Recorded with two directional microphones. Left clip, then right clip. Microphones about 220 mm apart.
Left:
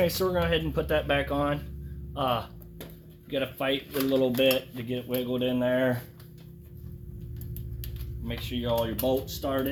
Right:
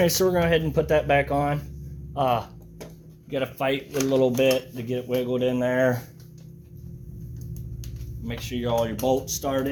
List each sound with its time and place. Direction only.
0.0 s speech: 40° right (ahead or behind)
8.2 s speech: 35° right (ahead or behind)